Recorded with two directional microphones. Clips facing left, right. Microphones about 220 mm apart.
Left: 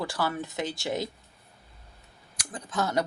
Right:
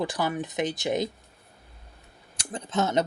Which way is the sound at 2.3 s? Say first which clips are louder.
Right 4 dB; 25° right (ahead or behind).